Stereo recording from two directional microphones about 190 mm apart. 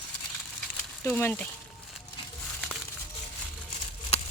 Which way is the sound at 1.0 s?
10° left (ahead or behind).